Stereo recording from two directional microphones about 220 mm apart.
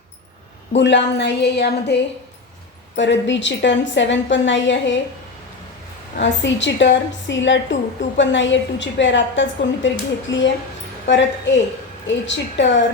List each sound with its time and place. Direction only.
0.8 s a woman's voice: 55° left (ahead or behind)
3.0 s a woman's voice: 55° left (ahead or behind)
6.1 s a woman's voice: 55° left (ahead or behind)